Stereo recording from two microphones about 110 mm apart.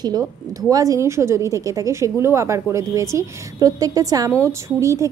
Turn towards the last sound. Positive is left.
turn(degrees=-30)  # may be behind; listen again after turning